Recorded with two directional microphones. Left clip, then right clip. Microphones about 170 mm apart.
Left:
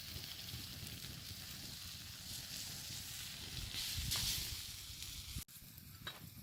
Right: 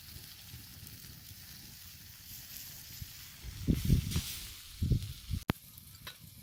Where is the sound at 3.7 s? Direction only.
20° left (ahead or behind).